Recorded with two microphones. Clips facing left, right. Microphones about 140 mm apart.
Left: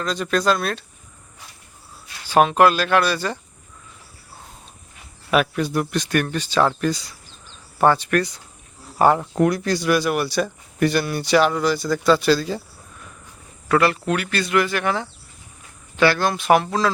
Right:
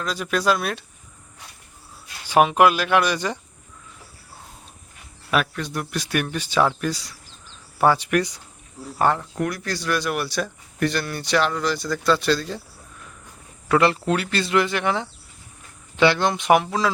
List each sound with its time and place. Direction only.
0.0 s speech: 5° right (ahead or behind)
2.2 s speech: 15° right (ahead or behind)
5.3 s speech: 5° left (ahead or behind)
6.0 s speech: 10° right (ahead or behind)
9.0 s speech: 10° left (ahead or behind)
9.4 s speech: 20° left (ahead or behind); by 12.6 s 5° left (ahead or behind)
13.7 s speech: 25° right (ahead or behind)